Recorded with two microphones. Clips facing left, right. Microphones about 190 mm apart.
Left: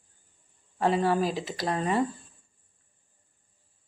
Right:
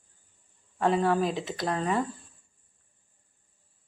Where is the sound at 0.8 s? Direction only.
5° left (ahead or behind).